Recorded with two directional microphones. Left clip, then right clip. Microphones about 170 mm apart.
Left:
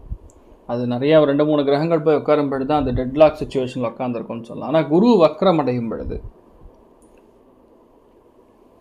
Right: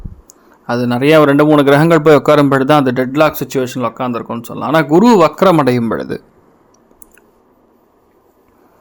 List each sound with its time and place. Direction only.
0.3 s a man's voice: 25° right (ahead or behind)